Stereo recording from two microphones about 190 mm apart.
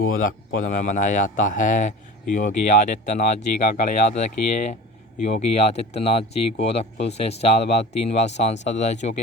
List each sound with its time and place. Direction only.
0.2 s speech: 45° left (ahead or behind)